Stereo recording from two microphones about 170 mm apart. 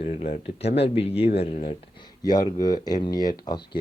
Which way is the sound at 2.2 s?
25° left (ahead or behind).